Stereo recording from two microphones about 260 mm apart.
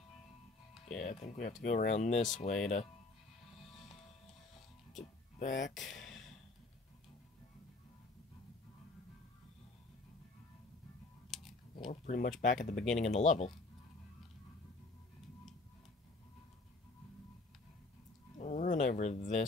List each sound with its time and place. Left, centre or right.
1.0 s speech: left
3.6 s music: centre
4.9 s speech: left
5.9 s a sound: centre
11.2 s a sound: centre
11.9 s speech: left
12.7 s speech: centre
13.0 s speech: left
18.4 s a sound: left